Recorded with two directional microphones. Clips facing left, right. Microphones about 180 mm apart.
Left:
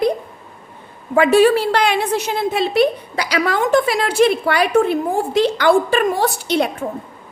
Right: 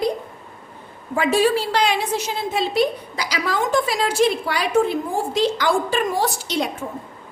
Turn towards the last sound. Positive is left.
turn(degrees=60)  # may be behind; listen again after turning